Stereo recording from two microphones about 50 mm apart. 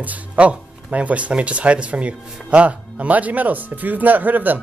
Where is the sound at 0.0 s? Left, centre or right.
Right.